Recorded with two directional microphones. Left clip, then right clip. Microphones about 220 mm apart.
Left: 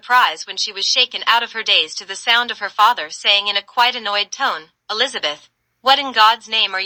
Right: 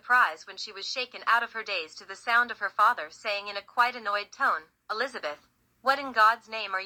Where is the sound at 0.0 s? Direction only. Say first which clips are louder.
Left 9 dB; 45° left (ahead or behind).